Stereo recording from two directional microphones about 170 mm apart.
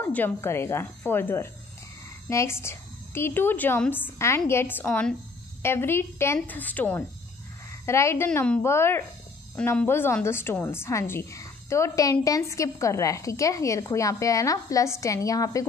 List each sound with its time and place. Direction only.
0.0 s a woman's voice: 10° left (ahead or behind)